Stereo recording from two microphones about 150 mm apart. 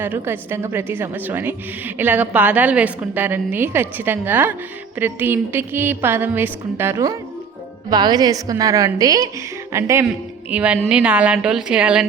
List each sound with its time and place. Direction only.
0.0 s a woman's voice: 15° right (ahead or behind)